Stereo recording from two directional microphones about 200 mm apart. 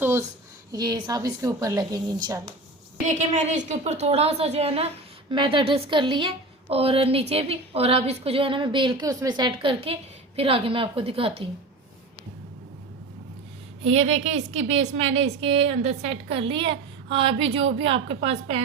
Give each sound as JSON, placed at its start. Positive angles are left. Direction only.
{"t": 0.0, "sound": "a sound", "side_deg": -10}
{"t": 0.7, "sound": "a woman's voice", "side_deg": -20}
{"t": 3.1, "sound": "a woman's voice", "side_deg": -35}
{"t": 13.8, "sound": "a woman's voice", "side_deg": -35}